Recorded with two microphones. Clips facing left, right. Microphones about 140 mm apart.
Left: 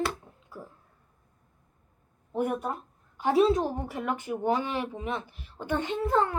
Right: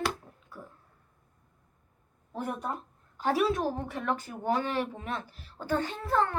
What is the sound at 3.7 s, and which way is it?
A woman's voice, 5° left (ahead or behind).